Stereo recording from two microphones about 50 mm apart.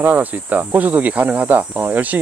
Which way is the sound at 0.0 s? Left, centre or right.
Right.